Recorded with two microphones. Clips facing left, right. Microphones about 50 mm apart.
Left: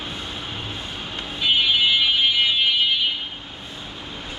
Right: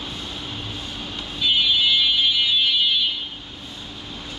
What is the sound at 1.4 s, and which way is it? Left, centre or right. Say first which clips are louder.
Fire alarm: left 1 dB; left.